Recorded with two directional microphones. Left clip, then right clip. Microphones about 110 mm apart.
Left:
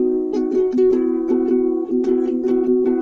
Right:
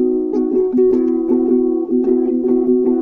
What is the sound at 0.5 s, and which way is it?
Music, 40° right (ahead or behind).